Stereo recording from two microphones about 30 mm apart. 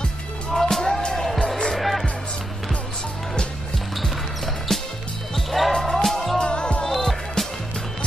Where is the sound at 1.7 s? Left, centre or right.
Centre.